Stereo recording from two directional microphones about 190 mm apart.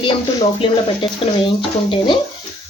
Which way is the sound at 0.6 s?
25° left (ahead or behind).